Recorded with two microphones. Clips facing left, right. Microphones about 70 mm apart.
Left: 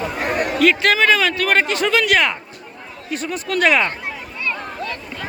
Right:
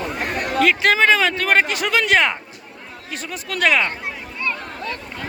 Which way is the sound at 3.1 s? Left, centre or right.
Centre.